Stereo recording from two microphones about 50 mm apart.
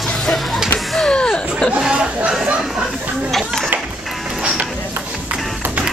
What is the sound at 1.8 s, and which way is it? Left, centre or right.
Chatter, centre.